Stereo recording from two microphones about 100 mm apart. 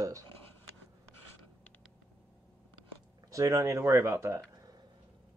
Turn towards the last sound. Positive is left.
turn(degrees=-30)  # may be behind; listen again after turning